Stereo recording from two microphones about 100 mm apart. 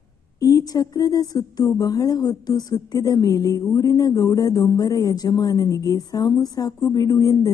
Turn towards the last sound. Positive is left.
turn(degrees=35)  # may be behind; listen again after turning